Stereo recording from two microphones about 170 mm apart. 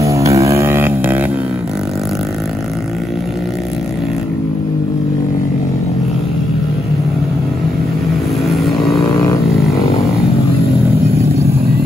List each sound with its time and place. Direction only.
0.0 s vehicle: 20° right (ahead or behind)
8.5 s vehicle: centre (ahead or behind)